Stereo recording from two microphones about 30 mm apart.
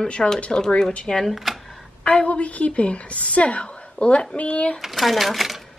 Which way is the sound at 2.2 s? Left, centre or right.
Left.